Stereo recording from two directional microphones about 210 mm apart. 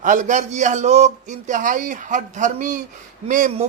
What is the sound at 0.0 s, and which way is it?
Speech, 35° right (ahead or behind).